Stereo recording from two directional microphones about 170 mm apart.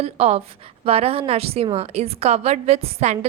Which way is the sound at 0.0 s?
35° right (ahead or behind).